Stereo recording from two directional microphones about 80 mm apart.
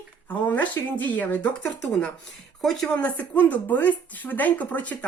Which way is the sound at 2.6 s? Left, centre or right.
Centre.